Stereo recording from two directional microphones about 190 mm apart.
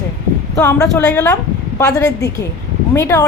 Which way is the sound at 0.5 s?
15° left (ahead or behind).